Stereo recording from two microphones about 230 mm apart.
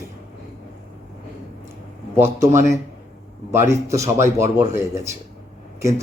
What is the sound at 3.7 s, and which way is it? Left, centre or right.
A man's voice, centre.